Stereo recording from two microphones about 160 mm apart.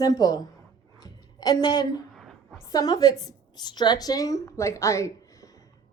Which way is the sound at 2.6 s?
25° left (ahead or behind).